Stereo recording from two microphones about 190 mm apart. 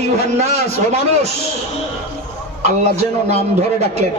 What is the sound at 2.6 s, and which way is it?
Speech, 35° right (ahead or behind).